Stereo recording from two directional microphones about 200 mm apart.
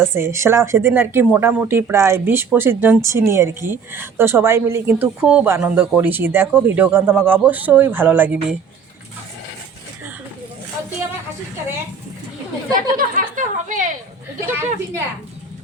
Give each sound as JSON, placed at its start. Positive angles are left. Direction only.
{"t": 0.0, "sound": "speech", "side_deg": -10}
{"t": 13.0, "sound": "a sound", "side_deg": -40}
{"t": 14.4, "sound": "speech", "side_deg": -10}